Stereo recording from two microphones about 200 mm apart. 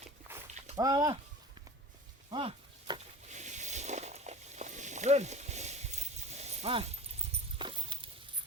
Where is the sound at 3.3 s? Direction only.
35° right (ahead or behind).